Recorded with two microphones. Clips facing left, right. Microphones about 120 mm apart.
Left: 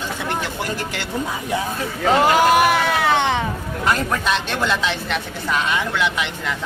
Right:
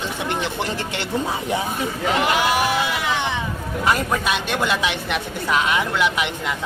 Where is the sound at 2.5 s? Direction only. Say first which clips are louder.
Left 5 dB; 55° left (ahead or behind).